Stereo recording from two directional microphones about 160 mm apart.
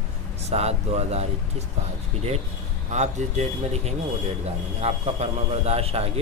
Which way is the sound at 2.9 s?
45° right (ahead or behind).